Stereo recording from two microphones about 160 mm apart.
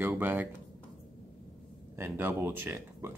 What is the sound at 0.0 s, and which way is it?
Speech, 10° right (ahead or behind).